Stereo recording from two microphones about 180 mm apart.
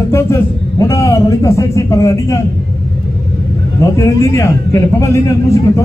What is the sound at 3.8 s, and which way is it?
A man's voice, 15° left (ahead or behind).